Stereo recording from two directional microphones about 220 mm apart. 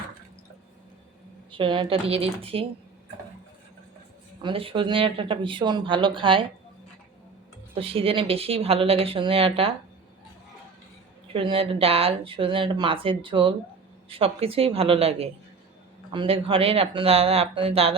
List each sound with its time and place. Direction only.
1.5 s speech: 20° right (ahead or behind)
4.4 s speech: 25° right (ahead or behind)
7.8 s speech: 25° right (ahead or behind)
11.3 s speech: 25° right (ahead or behind)